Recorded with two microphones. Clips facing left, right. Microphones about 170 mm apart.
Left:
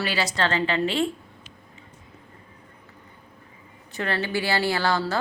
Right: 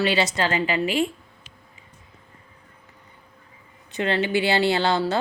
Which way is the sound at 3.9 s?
20° right (ahead or behind).